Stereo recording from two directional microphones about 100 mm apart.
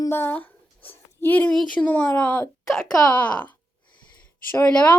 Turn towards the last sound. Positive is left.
turn(degrees=10)  # may be behind; listen again after turning